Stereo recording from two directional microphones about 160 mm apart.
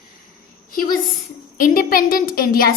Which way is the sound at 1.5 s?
60° left (ahead or behind).